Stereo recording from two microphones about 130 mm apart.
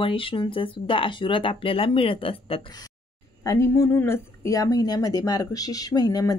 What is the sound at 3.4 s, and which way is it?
A woman's voice, 20° left (ahead or behind).